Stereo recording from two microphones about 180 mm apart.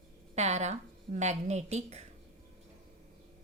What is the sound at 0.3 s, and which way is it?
A woman's voice, 40° right (ahead or behind).